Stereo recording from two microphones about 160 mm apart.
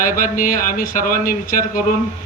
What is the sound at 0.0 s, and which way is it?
Speech, 60° left (ahead or behind).